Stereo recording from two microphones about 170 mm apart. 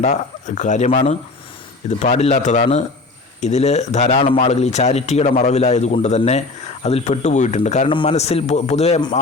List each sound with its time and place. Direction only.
0.0 s speech: 45° left (ahead or behind)
7.9 s speech: 30° left (ahead or behind)